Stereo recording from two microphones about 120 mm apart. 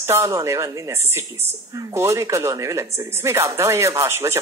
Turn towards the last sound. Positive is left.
turn(degrees=-20)  # may be behind; listen again after turning